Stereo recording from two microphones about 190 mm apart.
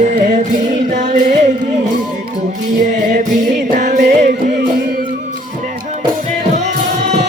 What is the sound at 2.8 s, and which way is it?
Music, 40° right (ahead or behind).